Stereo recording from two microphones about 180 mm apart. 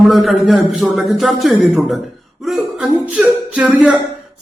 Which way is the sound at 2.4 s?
5° right (ahead or behind).